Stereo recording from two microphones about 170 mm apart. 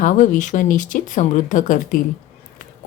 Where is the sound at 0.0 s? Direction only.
45° left (ahead or behind).